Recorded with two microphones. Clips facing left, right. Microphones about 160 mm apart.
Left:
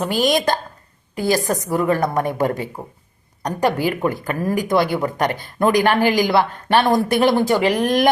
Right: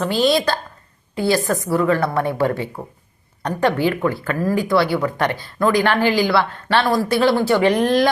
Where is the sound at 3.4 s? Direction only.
10° left (ahead or behind).